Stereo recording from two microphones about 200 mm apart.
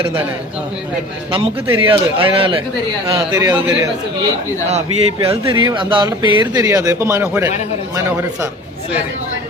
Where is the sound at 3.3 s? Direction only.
15° right (ahead or behind).